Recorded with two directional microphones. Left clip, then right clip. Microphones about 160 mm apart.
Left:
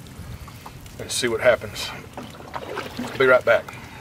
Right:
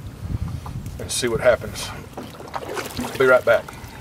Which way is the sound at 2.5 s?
20° right (ahead or behind).